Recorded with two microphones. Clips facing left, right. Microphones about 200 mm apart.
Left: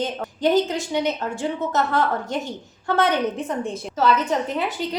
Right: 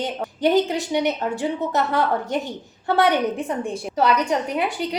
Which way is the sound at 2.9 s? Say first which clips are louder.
Right 2 dB; 15° right (ahead or behind).